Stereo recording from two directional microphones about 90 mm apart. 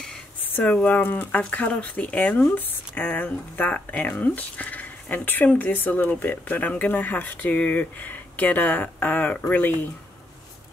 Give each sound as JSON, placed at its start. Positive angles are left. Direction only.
{"t": 0.4, "sound": "speech", "side_deg": 20}